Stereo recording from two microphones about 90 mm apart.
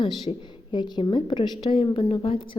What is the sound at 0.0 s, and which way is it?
A woman's voice, 60° left (ahead or behind).